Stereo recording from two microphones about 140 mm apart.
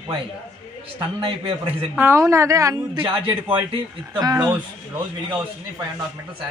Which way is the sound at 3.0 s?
40° right (ahead or behind).